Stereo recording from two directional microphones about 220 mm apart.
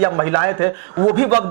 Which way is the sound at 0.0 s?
20° right (ahead or behind).